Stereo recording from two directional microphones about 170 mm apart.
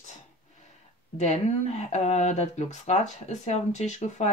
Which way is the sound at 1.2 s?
40° left (ahead or behind).